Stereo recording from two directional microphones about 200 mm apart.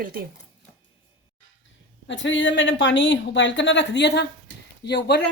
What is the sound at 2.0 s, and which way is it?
Speech, 65° left (ahead or behind).